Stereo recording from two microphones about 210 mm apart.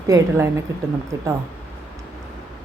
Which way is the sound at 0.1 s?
15° right (ahead or behind).